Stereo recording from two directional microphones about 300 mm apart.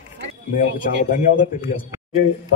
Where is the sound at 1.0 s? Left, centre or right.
Left.